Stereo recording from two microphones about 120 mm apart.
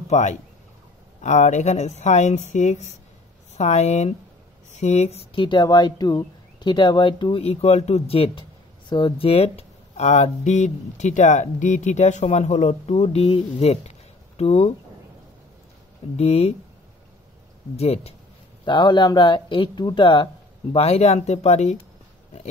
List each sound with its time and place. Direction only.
0.1 s speech: 75° left (ahead or behind)
3.5 s speech: 65° left (ahead or behind); by 7.4 s 40° left (ahead or behind)
7.4 s speech: 65° left (ahead or behind)
12.9 s speech: 55° left (ahead or behind)
16.2 s speech: 60° left (ahead or behind)
17.7 s speech: 60° left (ahead or behind)
18.7 s speech: 40° left (ahead or behind)
20.7 s speech: 60° left (ahead or behind)